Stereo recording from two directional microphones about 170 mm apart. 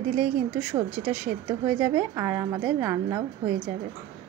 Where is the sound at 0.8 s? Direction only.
35° right (ahead or behind).